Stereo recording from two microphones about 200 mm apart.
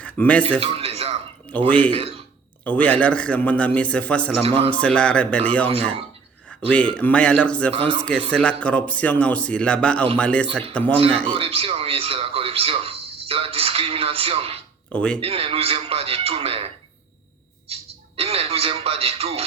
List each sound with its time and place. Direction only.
0.0 s speech: 5° left (ahead or behind)
0.6 s a sound: 30° right (ahead or behind)
1.5 s a man's voice: 5° left (ahead or behind)
1.9 s a man's voice: 30° right (ahead or behind)
2.6 s a man's voice: 5° left (ahead or behind)
4.4 s a man's voice: 30° right (ahead or behind)
4.7 s speech: 5° left (ahead or behind)
6.7 s speech: 5° left (ahead or behind)
11.3 s a man's voice: 30° right (ahead or behind)
14.9 s speech: 5° left (ahead or behind)
15.2 s a man's voice: 30° right (ahead or behind)
18.2 s a man's voice: 30° right (ahead or behind)